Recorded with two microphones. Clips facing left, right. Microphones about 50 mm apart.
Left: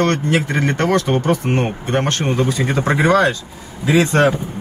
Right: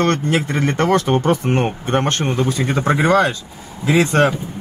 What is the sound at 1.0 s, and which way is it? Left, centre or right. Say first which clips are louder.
Speech: even; centre.